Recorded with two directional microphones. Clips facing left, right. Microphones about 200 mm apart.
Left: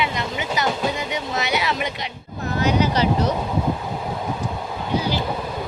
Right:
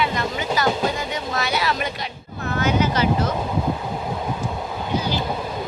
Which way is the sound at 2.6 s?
35° left (ahead or behind).